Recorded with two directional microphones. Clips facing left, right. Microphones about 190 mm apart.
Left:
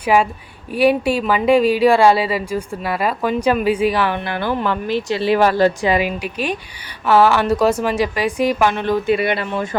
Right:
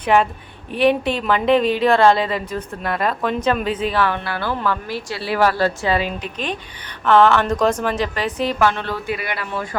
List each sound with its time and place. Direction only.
0.0 s a woman's voice: 10° left (ahead or behind); by 9.6 s 25° left (ahead or behind)